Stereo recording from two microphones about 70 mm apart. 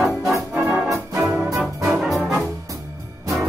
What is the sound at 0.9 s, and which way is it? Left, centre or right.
Music, right.